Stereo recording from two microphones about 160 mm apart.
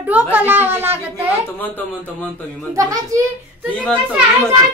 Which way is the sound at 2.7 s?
20° right (ahead or behind).